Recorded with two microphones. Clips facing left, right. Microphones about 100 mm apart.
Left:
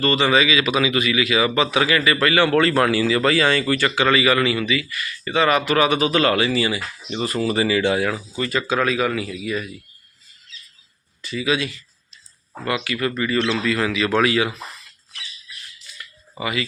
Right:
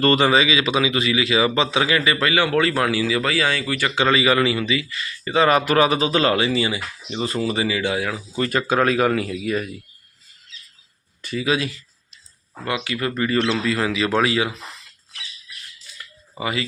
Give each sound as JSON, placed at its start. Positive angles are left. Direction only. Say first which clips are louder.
{"t": 0.0, "sound": "speech", "louder": "right 3 dB", "side_deg": -45}
{"t": 0.3, "sound": "a man's voice", "louder": "even", "side_deg": -30}
{"t": 2.2, "sound": "a man's voice", "louder": "left 4 dB", "side_deg": -10}
{"t": 3.9, "sound": "a man's voice", "louder": "right 2 dB", "side_deg": -25}
{"t": 8.4, "sound": "speech", "louder": "right 3 dB", "side_deg": -50}
{"t": 11.2, "sound": "speech", "louder": "even", "side_deg": -45}
{"t": 12.6, "sound": "a man's voice", "louder": "left 1 dB", "side_deg": -20}
{"t": 13.5, "sound": "a man's voice", "louder": "even", "side_deg": -25}
{"t": 16.4, "sound": "speech", "louder": "even", "side_deg": -30}